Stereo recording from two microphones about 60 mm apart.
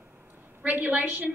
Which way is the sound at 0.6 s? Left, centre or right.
Right.